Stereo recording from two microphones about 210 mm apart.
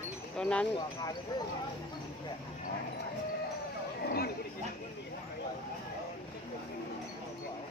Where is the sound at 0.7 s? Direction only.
20° left (ahead or behind).